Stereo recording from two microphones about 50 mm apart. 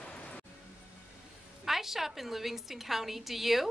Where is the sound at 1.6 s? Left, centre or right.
Centre.